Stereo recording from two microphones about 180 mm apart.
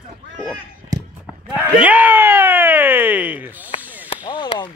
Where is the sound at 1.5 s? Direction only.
10° right (ahead or behind).